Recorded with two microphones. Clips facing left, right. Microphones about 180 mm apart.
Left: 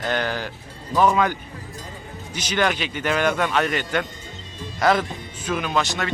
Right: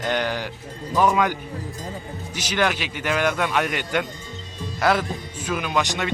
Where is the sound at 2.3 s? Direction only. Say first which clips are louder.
Left 1 dB; 10° right (ahead or behind).